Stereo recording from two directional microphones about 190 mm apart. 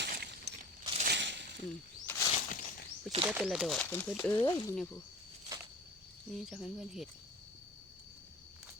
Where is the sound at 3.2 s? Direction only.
5° right (ahead or behind); by 4.4 s 10° left (ahead or behind).